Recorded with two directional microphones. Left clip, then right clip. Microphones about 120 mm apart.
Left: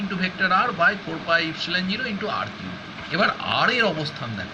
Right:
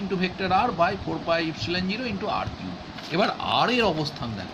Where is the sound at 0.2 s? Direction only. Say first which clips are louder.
Left 3 dB; 20° right (ahead or behind).